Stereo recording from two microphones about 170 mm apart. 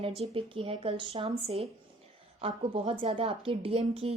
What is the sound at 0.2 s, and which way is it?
Speech, 30° right (ahead or behind).